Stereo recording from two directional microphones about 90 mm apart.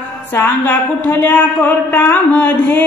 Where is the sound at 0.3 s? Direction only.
25° left (ahead or behind).